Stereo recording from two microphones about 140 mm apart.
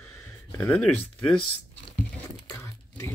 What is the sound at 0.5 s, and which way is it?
Speech, 15° left (ahead or behind).